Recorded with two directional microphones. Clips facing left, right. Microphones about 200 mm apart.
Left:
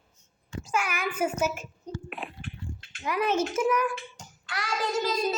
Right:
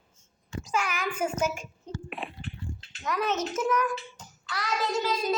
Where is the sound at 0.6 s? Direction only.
5° left (ahead or behind).